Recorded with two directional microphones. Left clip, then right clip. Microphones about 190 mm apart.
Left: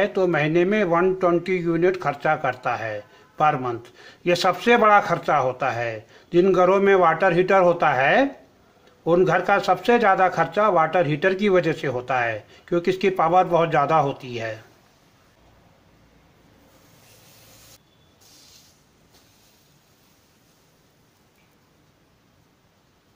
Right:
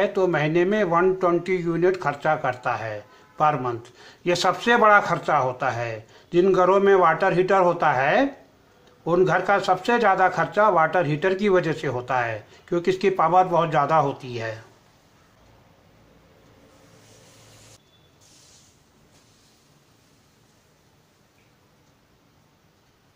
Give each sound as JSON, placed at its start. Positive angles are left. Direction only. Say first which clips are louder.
{"t": 0.0, "sound": "speech", "louder": "left 1 dB", "side_deg": 25}